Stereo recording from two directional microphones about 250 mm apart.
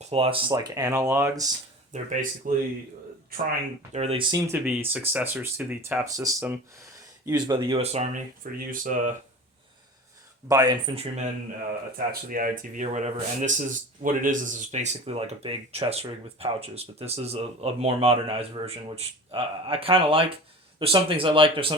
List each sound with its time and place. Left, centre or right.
0.0 s speech: right
1.9 s speech: right
3.9 s speech: right
10.5 s speech: centre
12.3 s speech: right